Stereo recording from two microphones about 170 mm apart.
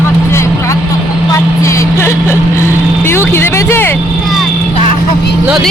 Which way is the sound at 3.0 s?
15° left (ahead or behind).